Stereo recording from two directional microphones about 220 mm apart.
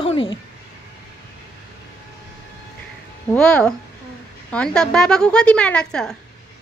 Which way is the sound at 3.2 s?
5° left (ahead or behind).